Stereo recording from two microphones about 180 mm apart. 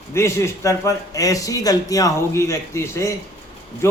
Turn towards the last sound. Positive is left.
turn(degrees=15)  # may be behind; listen again after turning